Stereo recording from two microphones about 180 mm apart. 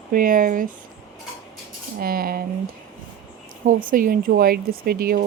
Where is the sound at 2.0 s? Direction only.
55° right (ahead or behind).